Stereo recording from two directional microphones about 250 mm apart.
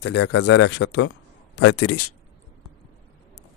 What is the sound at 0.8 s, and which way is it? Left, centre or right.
Speech, left.